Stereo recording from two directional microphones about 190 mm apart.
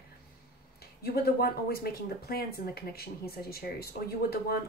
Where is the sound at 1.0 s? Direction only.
55° left (ahead or behind).